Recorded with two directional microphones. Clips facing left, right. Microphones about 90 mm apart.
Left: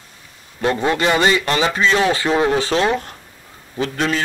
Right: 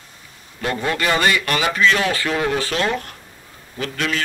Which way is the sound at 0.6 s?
25° left (ahead or behind).